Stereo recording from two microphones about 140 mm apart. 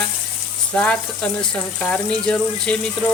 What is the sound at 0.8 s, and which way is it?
Speech, 10° left (ahead or behind).